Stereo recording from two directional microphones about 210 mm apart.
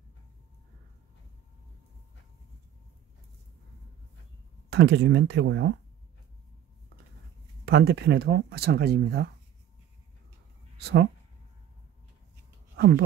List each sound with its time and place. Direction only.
4.6 s speech: 55° right (ahead or behind)
7.6 s speech: 50° right (ahead or behind)
10.8 s speech: 50° right (ahead or behind)
12.7 s speech: 50° right (ahead or behind)